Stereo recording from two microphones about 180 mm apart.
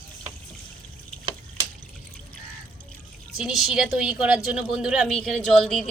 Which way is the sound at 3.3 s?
Centre (ahead or behind).